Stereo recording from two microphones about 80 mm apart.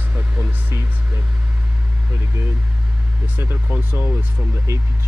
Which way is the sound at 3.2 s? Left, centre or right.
Right.